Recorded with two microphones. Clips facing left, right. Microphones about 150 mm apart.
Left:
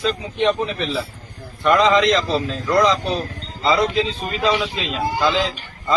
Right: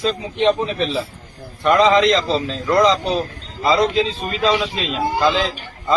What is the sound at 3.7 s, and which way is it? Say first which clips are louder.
Speech: right 2 dB; 35° right (ahead or behind).